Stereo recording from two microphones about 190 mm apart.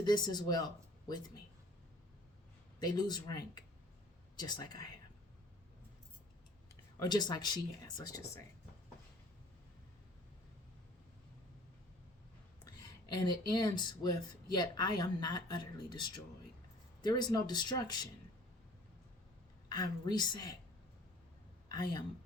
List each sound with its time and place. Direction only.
0.0 s speech: 20° left (ahead or behind)
2.8 s speech: 20° left (ahead or behind)
7.0 s speech: 20° left (ahead or behind)
12.6 s speech: 20° left (ahead or behind)
19.6 s speech: 20° left (ahead or behind)
21.7 s a man's voice: 20° left (ahead or behind)